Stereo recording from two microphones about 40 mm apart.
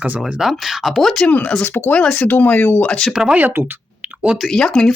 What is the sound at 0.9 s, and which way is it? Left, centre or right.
Speech, centre.